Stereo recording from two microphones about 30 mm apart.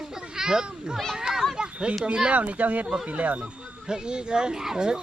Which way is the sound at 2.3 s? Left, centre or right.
Right.